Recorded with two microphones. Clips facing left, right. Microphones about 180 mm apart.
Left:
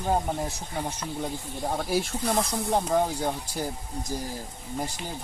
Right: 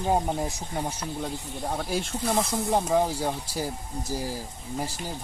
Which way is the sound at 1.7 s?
Centre (ahead or behind).